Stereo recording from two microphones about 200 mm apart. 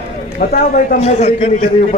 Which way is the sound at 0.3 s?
45° left (ahead or behind).